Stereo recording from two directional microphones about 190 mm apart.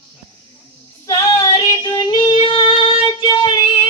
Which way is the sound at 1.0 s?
20° left (ahead or behind).